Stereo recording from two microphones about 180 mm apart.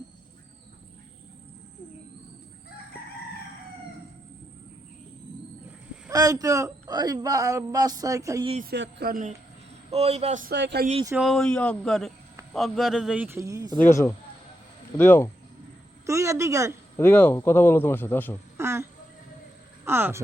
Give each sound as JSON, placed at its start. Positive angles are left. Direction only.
{"t": 6.1, "sound": "a man's voice", "side_deg": -20}
{"t": 8.6, "sound": "a man's voice", "side_deg": -70}
{"t": 9.9, "sound": "a man's voice", "side_deg": -35}
{"t": 10.4, "sound": "speech", "side_deg": -70}
{"t": 11.2, "sound": "a man's voice", "side_deg": 0}
{"t": 14.9, "sound": "speech", "side_deg": 10}
{"t": 16.0, "sound": "a woman's voice", "side_deg": -15}
{"t": 17.0, "sound": "speech", "side_deg": 10}
{"t": 18.5, "sound": "a sound", "side_deg": -15}
{"t": 19.8, "sound": "speech", "side_deg": -15}